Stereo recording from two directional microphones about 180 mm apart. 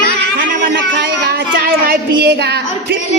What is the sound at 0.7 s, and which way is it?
A woman's voice, 70° right (ahead or behind).